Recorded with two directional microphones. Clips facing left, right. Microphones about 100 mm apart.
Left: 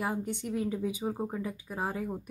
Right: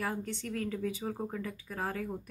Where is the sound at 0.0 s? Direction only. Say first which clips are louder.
Left 3 dB; 15° left (ahead or behind).